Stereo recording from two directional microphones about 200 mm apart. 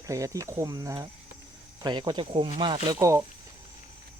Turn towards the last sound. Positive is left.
turn(degrees=-15)  # may be behind; listen again after turning